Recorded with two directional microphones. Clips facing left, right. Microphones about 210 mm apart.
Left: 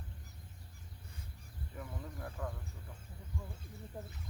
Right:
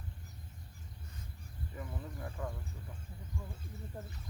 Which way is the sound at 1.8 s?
5° right (ahead or behind).